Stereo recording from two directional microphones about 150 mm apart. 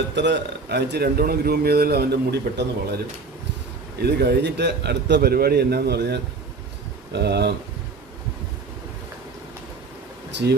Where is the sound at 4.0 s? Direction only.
90° right.